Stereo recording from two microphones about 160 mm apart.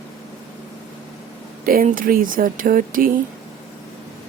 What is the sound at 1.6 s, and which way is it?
A woman's voice, 60° right (ahead or behind).